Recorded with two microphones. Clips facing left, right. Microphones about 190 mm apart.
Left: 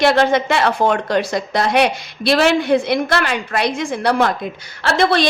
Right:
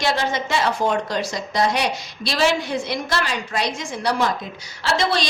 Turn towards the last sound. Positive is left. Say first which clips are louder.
# left 5 dB
turn(degrees=55)  # may be behind; listen again after turning